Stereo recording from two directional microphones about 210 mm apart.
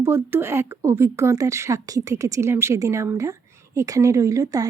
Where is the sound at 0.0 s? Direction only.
10° right (ahead or behind).